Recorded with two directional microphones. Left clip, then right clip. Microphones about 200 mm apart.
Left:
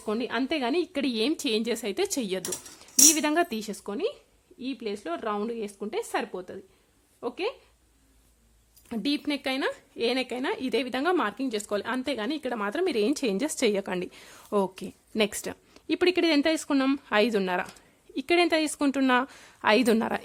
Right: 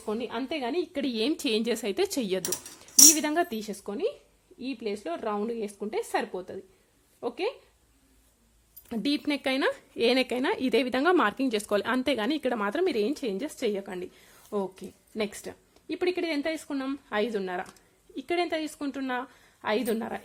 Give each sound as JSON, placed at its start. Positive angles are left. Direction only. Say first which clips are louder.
{"t": 0.0, "sound": "a woman's voice", "louder": "left 3 dB", "side_deg": 30}
{"t": 2.7, "sound": "a sound", "louder": "right 2 dB", "side_deg": 0}
{"t": 3.1, "sound": "a woman's voice", "louder": "left 1 dB", "side_deg": 10}
{"t": 8.9, "sound": "speech", "louder": "even", "side_deg": 0}
{"t": 13.1, "sound": "a woman's voice", "louder": "left 4 dB", "side_deg": 25}